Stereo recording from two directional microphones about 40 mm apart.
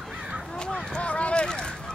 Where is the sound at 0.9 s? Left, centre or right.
Left.